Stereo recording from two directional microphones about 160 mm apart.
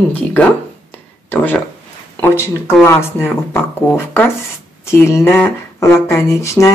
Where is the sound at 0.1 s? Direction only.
10° left (ahead or behind).